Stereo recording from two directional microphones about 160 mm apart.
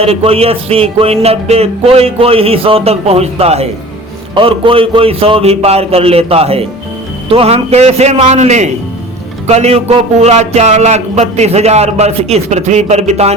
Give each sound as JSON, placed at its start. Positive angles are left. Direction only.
{"t": 0.0, "sound": "music", "side_deg": -40}
{"t": 9.5, "sound": "speech", "side_deg": -40}